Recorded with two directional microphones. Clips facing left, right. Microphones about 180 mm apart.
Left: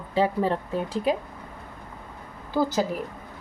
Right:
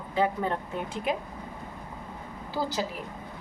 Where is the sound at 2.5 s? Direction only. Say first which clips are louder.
Left 7 dB; 50° left (ahead or behind).